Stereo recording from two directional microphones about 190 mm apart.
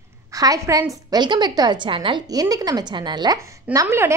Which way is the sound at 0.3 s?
20° right (ahead or behind).